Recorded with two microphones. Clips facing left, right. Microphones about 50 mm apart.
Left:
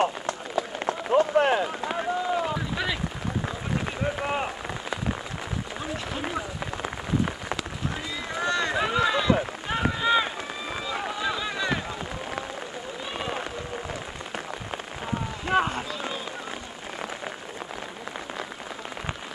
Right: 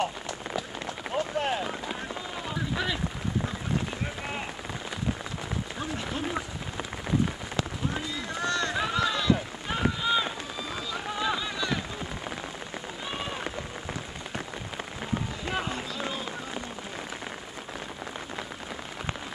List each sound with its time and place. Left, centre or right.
0.0 s run: left
8.4 s run: centre
11.1 s boat: centre
11.4 s boat: left
15.5 s run: left